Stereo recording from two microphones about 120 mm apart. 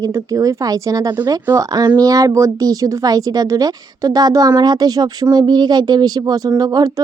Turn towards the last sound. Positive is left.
turn(degrees=-30)  # may be behind; listen again after turning